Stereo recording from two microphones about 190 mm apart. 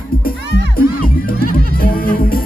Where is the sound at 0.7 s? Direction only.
50° left (ahead or behind).